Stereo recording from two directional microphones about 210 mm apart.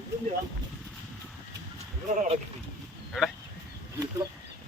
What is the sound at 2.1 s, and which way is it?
Speech, 35° right (ahead or behind).